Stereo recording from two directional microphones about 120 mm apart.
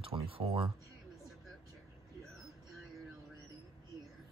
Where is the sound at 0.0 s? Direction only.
45° right (ahead or behind).